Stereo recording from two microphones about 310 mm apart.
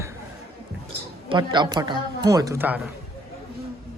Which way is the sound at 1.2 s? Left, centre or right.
Centre.